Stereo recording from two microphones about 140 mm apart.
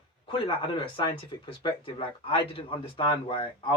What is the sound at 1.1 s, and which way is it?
Speech, 40° left (ahead or behind).